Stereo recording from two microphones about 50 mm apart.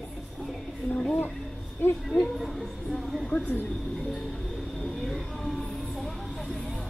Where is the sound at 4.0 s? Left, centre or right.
Centre.